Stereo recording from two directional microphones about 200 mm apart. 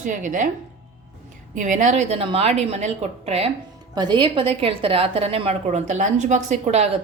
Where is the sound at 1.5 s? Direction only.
40° right (ahead or behind).